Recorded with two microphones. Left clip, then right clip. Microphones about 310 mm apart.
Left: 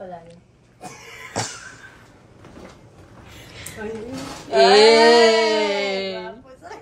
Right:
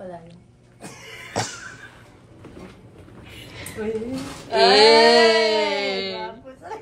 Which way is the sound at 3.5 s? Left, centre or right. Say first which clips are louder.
Even; centre.